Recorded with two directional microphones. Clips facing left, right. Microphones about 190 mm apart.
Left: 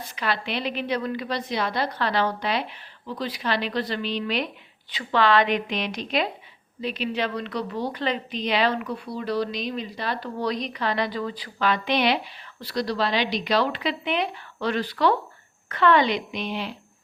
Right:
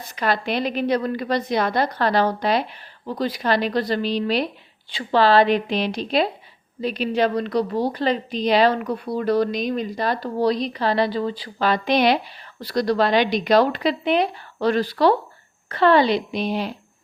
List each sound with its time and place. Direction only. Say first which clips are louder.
0.2 s a woman's voice: right 5 dB; 45° right (ahead or behind)